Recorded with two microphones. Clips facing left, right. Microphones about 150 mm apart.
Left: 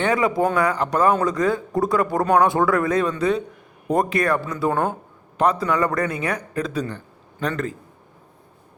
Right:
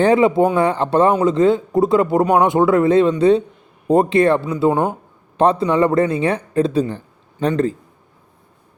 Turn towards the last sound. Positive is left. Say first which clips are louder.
# right 8 dB
turn(degrees=-30)  # may be behind; listen again after turning